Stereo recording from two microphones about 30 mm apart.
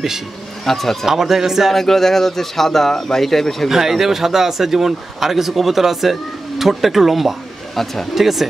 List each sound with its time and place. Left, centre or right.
0.7 s speech: centre
1.0 s speech: centre
1.7 s speech: centre
3.6 s speech: centre
7.7 s speech: centre
8.1 s speech: centre